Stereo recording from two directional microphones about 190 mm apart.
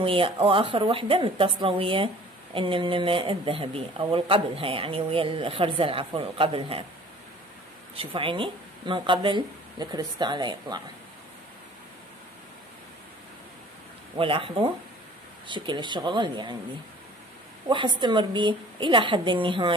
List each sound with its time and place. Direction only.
0.0 s speech: 30° right (ahead or behind)
7.9 s speech: 30° right (ahead or behind)
14.1 s speech: 30° right (ahead or behind)
17.6 s speech: 25° right (ahead or behind)